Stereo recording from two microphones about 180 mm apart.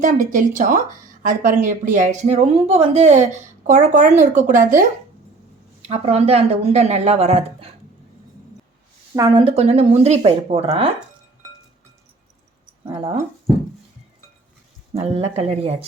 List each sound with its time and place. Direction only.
0.0 s speech: 45° right (ahead or behind)
5.9 s speech: 35° right (ahead or behind)
9.1 s speech: 30° right (ahead or behind)
12.8 s speech: 30° right (ahead or behind)
14.9 s speech: 35° right (ahead or behind)